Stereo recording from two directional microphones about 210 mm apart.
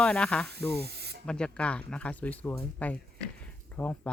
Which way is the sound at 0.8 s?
50° right (ahead or behind).